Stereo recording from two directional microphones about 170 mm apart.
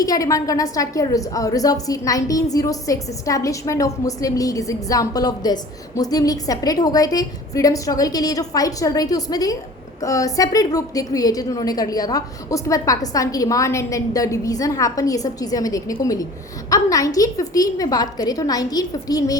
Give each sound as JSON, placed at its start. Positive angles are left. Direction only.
{"t": 0.0, "sound": "a woman's voice", "side_deg": 20}